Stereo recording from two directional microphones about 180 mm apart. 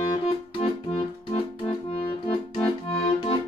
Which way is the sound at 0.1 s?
30° left (ahead or behind).